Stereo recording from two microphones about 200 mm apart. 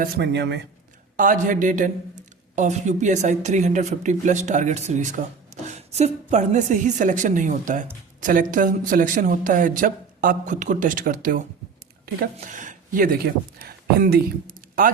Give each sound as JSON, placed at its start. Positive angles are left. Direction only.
{"t": 0.0, "sound": "speech", "side_deg": -55}
{"t": 1.1, "sound": "speech", "side_deg": -40}